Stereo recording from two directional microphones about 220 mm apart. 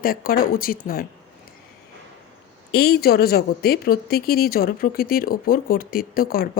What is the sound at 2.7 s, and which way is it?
A woman's voice, 45° left (ahead or behind).